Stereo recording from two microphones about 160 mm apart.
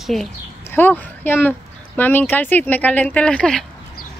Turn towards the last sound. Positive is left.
turn(degrees=5)  # may be behind; listen again after turning